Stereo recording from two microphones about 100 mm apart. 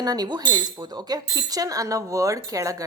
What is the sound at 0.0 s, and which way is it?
A woman's voice, 40° right (ahead or behind).